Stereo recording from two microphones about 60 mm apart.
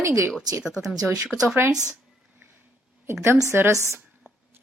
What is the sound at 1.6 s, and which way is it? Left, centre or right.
Speech, right.